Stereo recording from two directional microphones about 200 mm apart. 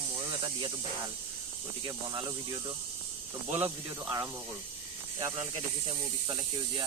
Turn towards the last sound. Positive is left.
turn(degrees=-25)  # may be behind; listen again after turning